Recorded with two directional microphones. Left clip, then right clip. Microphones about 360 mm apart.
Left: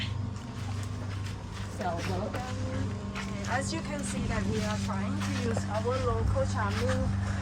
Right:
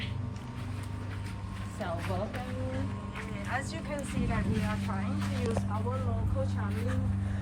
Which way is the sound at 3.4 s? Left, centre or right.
Centre.